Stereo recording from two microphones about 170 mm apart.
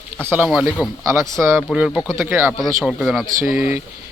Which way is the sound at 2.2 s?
10° right (ahead or behind).